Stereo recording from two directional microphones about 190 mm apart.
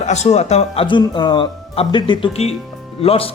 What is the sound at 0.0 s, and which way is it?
A man's voice, 35° left (ahead or behind).